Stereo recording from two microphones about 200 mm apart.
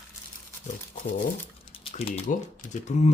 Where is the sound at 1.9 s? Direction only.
30° left (ahead or behind).